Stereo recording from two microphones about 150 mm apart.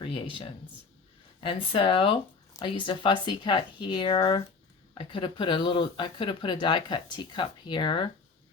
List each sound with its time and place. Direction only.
0.0 s speech: 35° left (ahead or behind)